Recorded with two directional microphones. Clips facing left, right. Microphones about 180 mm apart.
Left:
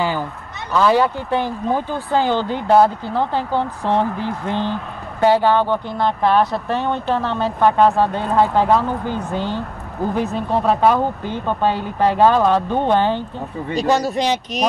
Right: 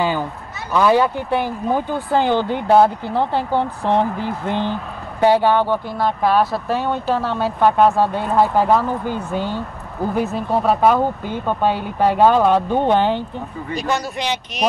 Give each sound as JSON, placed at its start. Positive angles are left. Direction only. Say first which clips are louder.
{"t": 0.7, "sound": "speech", "louder": "even", "side_deg": -15}
{"t": 13.7, "sound": "speech", "louder": "left 5 dB", "side_deg": 40}